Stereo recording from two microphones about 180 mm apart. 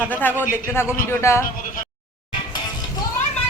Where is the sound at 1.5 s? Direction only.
50° left (ahead or behind).